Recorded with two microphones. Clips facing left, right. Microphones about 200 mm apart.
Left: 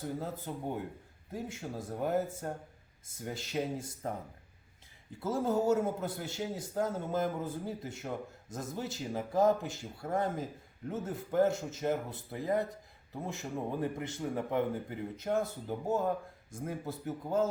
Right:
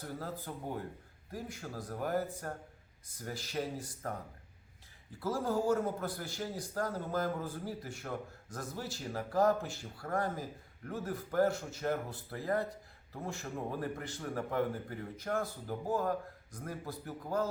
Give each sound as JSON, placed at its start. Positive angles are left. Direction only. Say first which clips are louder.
{"t": 0.0, "sound": "a man's voice", "louder": "left 4 dB", "side_deg": 20}
{"t": 5.2, "sound": "a man's voice", "louder": "left 2 dB", "side_deg": 25}